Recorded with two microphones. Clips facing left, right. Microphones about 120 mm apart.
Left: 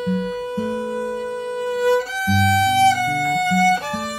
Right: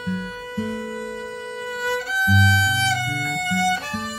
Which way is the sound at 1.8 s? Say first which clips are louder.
Left 6 dB; 45° left (ahead or behind).